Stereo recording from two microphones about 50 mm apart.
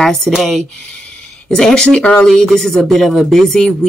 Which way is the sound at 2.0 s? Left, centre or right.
Left.